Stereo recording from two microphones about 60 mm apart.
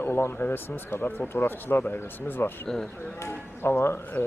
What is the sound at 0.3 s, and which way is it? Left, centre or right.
Speech, left.